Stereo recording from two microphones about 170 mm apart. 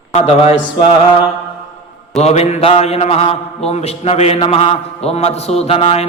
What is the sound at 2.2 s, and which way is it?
A man's voice, 40° left (ahead or behind).